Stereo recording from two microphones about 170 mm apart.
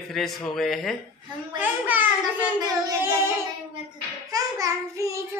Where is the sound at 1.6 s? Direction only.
10° right (ahead or behind).